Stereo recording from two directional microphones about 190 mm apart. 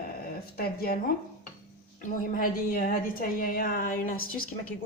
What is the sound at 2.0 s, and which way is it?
Speech, 45° left (ahead or behind).